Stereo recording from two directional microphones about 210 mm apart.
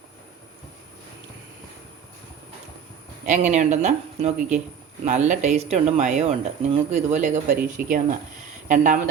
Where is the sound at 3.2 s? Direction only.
35° right (ahead or behind).